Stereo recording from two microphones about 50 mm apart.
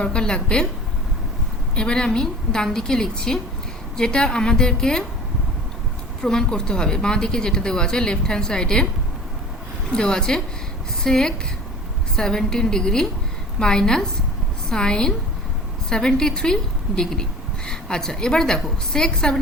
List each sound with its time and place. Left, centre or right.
0.0 s speech: centre
1.7 s speech: centre
6.2 s speech: centre
9.9 s a woman's voice: centre